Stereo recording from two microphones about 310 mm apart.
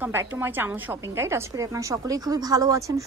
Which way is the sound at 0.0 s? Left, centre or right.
Centre.